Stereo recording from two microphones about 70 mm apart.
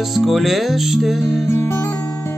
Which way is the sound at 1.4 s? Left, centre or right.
Left.